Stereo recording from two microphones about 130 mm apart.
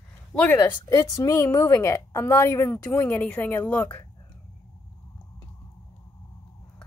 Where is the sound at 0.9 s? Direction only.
25° left (ahead or behind).